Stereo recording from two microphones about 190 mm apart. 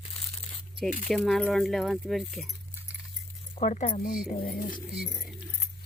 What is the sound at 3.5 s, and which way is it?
Speech, 40° left (ahead or behind).